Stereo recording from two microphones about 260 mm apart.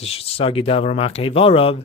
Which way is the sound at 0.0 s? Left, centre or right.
Left.